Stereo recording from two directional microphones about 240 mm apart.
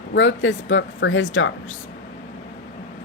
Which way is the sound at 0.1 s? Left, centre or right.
Left.